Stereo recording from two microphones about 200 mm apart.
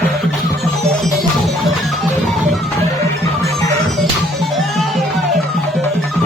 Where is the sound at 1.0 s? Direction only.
Centre (ahead or behind).